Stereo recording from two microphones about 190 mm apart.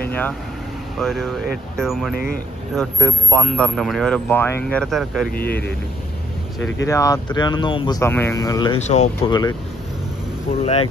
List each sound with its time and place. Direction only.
0.9 s speech: centre (ahead or behind)
2.1 s speech: 50° left (ahead or behind)
2.7 s speech: 5° left (ahead or behind)
5.3 s a man's voice: 55° left (ahead or behind)
6.9 s a man's voice: 15° left (ahead or behind)
8.8 s speech: 35° left (ahead or behind)
9.3 s speech: 20° left (ahead or behind)
10.6 s speech: 35° left (ahead or behind)